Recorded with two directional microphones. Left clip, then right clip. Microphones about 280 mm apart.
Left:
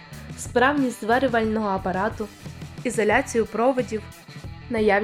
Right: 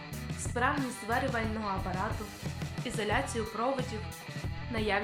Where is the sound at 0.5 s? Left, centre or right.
Left.